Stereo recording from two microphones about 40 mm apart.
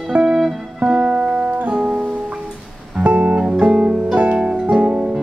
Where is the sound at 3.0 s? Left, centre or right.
Right.